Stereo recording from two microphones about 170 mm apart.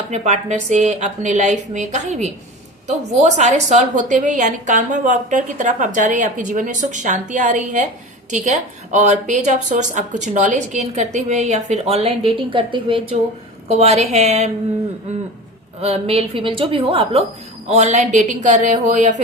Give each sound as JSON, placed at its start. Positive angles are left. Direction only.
{"t": 0.1, "sound": "a woman's voice", "side_deg": -40}
{"t": 15.8, "sound": "a woman's voice", "side_deg": -35}